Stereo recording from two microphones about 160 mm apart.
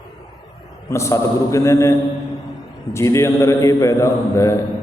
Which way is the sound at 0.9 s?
20° left (ahead or behind).